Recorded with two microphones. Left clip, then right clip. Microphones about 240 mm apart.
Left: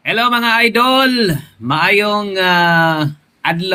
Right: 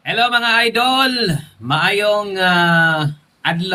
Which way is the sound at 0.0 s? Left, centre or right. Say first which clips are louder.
Left 2 dB; centre.